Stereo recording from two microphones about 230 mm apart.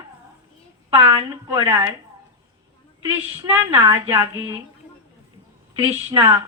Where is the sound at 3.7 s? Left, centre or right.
Centre.